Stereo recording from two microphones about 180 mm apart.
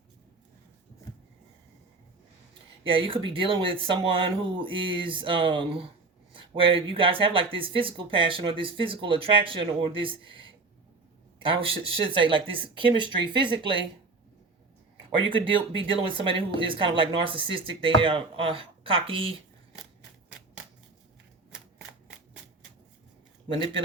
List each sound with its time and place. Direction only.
2.8 s speech: 30° right (ahead or behind)
15.3 s speech: 30° right (ahead or behind)